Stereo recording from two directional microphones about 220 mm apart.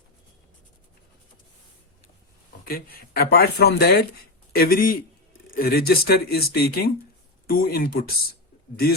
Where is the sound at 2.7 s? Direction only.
40° left (ahead or behind).